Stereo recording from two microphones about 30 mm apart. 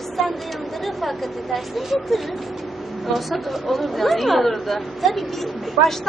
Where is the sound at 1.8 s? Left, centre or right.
Centre.